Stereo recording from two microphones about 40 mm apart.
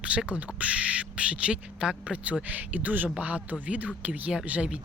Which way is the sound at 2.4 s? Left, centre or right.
Right.